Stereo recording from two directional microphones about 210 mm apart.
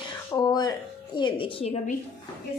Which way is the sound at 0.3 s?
20° left (ahead or behind).